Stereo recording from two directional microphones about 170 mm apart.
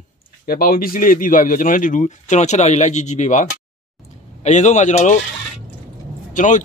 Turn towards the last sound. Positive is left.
turn(degrees=45)  # may be behind; listen again after turning